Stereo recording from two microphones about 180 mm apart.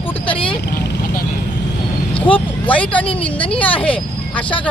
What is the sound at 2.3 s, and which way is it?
Speech, 10° left (ahead or behind).